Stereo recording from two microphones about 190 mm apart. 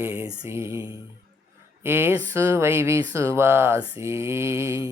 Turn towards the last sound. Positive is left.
turn(degrees=-15)  # may be behind; listen again after turning